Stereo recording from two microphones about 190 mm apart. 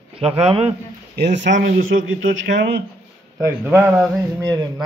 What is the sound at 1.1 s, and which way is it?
Speech, 65° right (ahead or behind).